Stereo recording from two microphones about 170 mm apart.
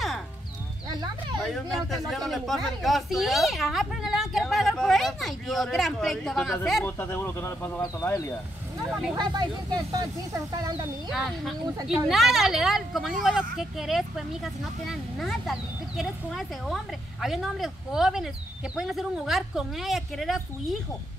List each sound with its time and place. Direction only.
0.8 s speech: 25° right (ahead or behind)
1.4 s speech: centre (ahead or behind)
6.8 s speech: 15° left (ahead or behind)
9.1 s speech: 25° right (ahead or behind)
11.1 s speech: centre (ahead or behind)